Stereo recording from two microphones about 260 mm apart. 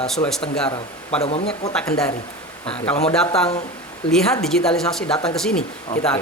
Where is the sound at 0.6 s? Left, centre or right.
Left.